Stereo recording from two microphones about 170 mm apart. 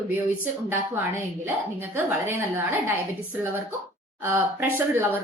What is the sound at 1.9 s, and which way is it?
A woman's voice, 10° right (ahead or behind).